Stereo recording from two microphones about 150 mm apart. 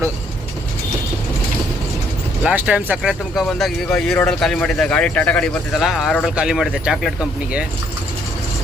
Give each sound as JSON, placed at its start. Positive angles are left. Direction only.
{"t": 2.4, "sound": "speech", "side_deg": -10}